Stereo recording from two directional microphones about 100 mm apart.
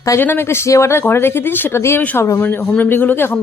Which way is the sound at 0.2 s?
25° left (ahead or behind).